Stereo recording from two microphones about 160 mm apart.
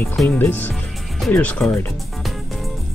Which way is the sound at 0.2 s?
10° left (ahead or behind).